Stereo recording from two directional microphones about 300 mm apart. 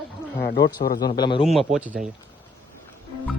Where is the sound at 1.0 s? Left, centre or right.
Centre.